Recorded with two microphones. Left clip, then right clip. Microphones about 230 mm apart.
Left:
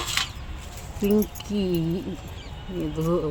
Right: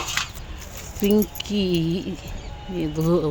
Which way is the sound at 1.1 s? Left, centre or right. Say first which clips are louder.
Right 2 dB; centre.